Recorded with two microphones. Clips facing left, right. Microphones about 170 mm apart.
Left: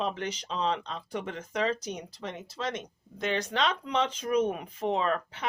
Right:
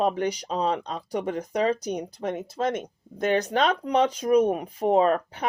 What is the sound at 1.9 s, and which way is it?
Speech, 50° right (ahead or behind).